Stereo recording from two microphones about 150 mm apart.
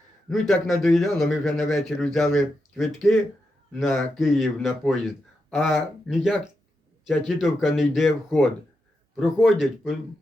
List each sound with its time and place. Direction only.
0.3 s a man's voice: centre (ahead or behind)